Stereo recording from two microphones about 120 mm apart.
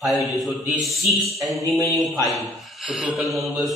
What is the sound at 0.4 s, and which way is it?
Mantra, centre (ahead or behind).